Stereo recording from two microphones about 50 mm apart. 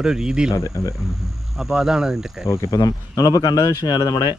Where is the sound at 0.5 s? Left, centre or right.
Left.